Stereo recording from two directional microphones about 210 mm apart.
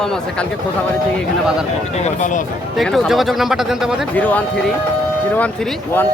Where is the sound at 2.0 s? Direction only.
35° left (ahead or behind).